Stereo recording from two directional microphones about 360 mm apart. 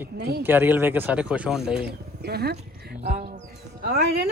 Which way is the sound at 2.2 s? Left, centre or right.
Right.